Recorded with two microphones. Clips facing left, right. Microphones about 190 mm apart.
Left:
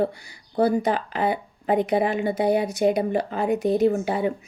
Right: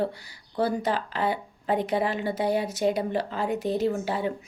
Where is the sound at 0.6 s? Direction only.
15° left (ahead or behind).